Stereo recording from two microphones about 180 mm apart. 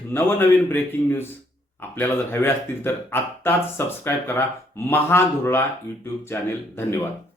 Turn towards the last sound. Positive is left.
turn(degrees=15)  # may be behind; listen again after turning